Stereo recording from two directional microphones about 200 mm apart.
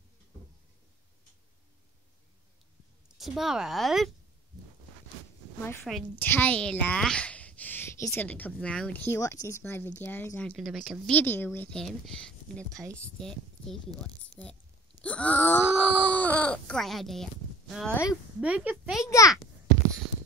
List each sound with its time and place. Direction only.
3.2 s speech: centre (ahead or behind)
5.9 s speech: 5° left (ahead or behind)
14.3 s groan: 5° left (ahead or behind)
15.8 s speech: 5° left (ahead or behind)
19.0 s speech: 15° left (ahead or behind)